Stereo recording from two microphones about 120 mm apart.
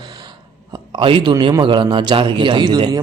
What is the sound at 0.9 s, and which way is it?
Speech, 45° right (ahead or behind).